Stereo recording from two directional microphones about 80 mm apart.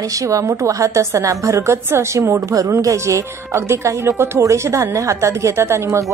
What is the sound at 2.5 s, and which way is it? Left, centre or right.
A woman's voice, right.